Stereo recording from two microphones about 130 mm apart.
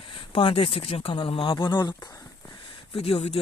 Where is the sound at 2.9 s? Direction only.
50° left (ahead or behind).